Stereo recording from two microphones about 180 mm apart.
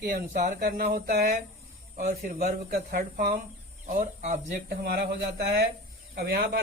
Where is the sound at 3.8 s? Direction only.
45° right (ahead or behind).